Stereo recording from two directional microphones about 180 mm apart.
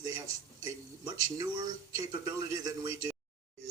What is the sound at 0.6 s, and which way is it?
Speech, 20° right (ahead or behind).